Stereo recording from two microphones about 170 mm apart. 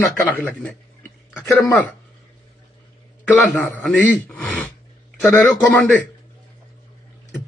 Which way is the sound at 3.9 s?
10° left (ahead or behind).